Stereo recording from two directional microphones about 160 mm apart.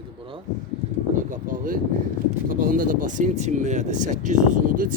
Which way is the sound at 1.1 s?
55° right (ahead or behind).